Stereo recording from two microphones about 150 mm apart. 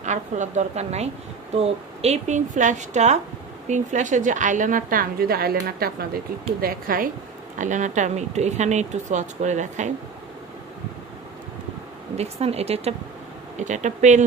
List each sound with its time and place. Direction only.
0.0 s a woman's voice: 50° right (ahead or behind); by 7.1 s 70° right (ahead or behind)
7.6 s speech: 55° right (ahead or behind)
12.1 s speech: 45° right (ahead or behind)